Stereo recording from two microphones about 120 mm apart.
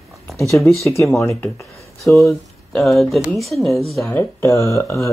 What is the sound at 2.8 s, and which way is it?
Speech, centre (ahead or behind).